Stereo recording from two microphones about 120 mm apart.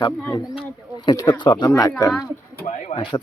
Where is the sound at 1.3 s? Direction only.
40° left (ahead or behind).